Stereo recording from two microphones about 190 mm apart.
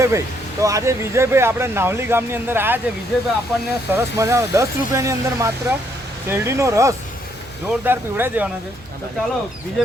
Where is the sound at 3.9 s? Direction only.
15° right (ahead or behind).